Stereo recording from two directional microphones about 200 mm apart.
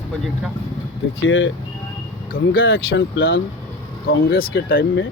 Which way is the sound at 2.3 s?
50° left (ahead or behind).